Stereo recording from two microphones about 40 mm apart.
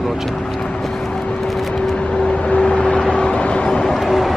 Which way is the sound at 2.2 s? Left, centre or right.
Left.